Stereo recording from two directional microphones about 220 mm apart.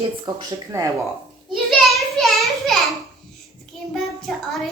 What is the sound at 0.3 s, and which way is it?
Speech, 15° right (ahead or behind).